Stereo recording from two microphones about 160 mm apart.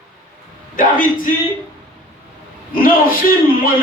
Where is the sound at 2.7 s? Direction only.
65° left (ahead or behind).